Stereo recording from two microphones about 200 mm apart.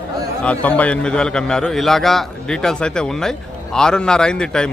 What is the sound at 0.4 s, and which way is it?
Speech, 5° left (ahead or behind).